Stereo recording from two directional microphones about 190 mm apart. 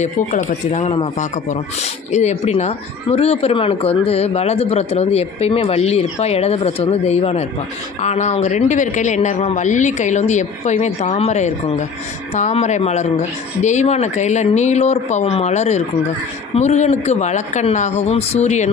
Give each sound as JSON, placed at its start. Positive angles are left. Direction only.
{"t": 0.0, "sound": "speech", "side_deg": 40}
{"t": 2.1, "sound": "speech", "side_deg": 35}